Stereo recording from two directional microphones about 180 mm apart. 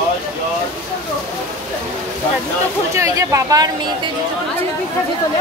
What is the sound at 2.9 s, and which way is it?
Speech, 15° right (ahead or behind).